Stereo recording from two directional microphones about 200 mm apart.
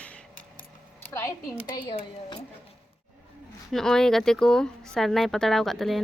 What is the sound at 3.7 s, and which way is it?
Speech, 5° left (ahead or behind).